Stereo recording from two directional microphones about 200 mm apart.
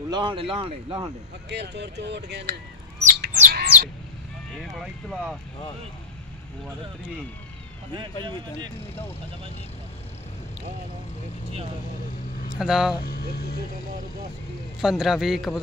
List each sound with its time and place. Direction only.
0.1 s speech: 25° right (ahead or behind)
1.5 s speech: 55° right (ahead or behind)
3.0 s bird: 50° right (ahead or behind)
7.9 s speech: 25° right (ahead or behind)
12.5 s a man's voice: 5° right (ahead or behind)
13.0 s speech: 50° left (ahead or behind)
14.8 s a man's voice: centre (ahead or behind)